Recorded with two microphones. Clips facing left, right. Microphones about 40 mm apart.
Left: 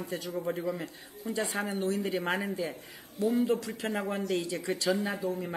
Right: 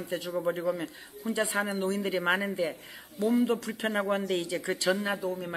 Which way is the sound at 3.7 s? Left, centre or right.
Right.